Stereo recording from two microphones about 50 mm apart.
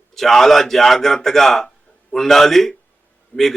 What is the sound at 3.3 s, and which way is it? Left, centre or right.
Speech, left.